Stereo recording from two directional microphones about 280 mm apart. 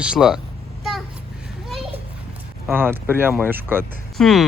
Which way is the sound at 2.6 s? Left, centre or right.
Centre.